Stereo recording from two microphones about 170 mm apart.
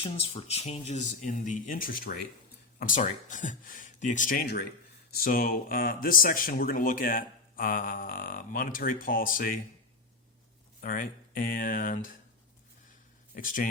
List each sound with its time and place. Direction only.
0.0 s speech: 30° left (ahead or behind); by 9.6 s 55° left (ahead or behind)
10.8 s speech: 55° left (ahead or behind)
13.3 s speech: 50° left (ahead or behind)